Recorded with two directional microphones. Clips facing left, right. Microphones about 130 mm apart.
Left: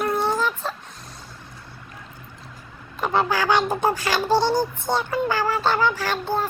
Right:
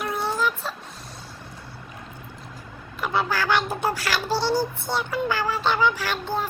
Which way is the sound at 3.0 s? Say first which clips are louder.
Left 3 dB; 45° left (ahead or behind).